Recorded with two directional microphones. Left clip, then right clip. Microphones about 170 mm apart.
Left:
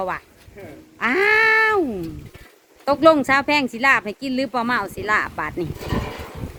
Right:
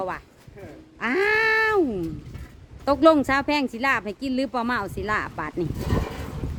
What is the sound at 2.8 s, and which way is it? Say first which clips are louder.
Speech: left 3 dB; 30° right (ahead or behind).